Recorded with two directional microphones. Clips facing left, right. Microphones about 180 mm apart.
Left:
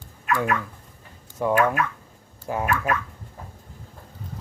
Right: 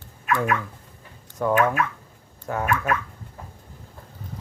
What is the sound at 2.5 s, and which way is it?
Speech, 15° left (ahead or behind).